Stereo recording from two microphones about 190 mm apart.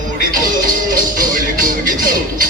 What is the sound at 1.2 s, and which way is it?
Music, 45° right (ahead or behind).